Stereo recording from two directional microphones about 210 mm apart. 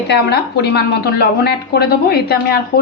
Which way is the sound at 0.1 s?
50° left (ahead or behind).